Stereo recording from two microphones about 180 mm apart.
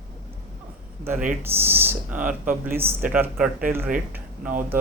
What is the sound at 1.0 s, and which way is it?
Speech, 10° right (ahead or behind).